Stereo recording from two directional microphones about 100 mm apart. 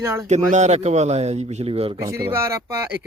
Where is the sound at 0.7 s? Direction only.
90° right.